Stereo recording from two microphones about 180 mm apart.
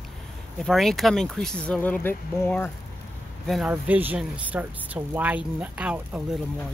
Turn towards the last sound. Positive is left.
turn(degrees=-5)  # may be behind; listen again after turning